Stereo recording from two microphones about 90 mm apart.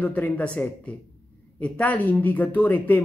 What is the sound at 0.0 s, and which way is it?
Speech, 15° left (ahead or behind).